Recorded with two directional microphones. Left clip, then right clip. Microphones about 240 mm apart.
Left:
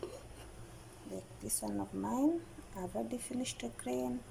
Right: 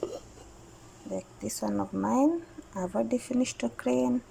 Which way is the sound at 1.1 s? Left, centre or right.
Centre.